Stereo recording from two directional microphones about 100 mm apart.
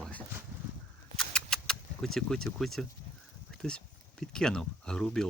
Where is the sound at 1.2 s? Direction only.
5° left (ahead or behind).